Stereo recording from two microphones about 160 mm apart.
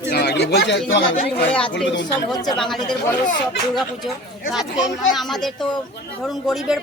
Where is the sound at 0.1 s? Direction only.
85° left.